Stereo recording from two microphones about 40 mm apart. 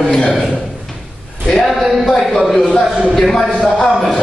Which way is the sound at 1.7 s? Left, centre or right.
Centre.